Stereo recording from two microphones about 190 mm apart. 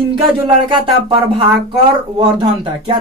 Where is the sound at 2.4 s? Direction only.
25° right (ahead or behind).